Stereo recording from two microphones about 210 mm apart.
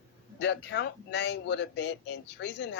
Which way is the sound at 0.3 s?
55° left (ahead or behind).